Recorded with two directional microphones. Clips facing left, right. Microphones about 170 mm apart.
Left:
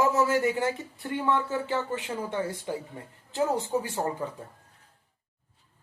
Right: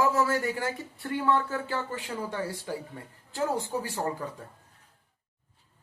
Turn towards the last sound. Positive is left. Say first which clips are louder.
# left 2 dB
turn(degrees=20)  # may be behind; listen again after turning